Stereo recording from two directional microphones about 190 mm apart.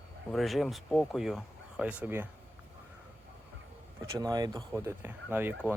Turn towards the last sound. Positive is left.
turn(degrees=-10)  # may be behind; listen again after turning